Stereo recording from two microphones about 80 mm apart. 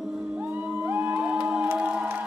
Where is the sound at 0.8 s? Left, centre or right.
Right.